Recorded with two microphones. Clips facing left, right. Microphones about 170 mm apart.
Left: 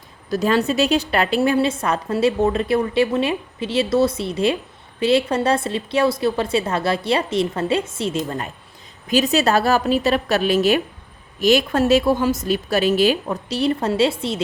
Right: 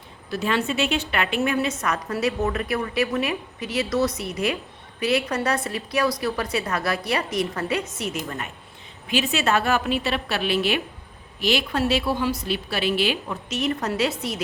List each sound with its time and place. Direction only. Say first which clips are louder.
0.3 s a woman's voice: left 6 dB; 40° left (ahead or behind)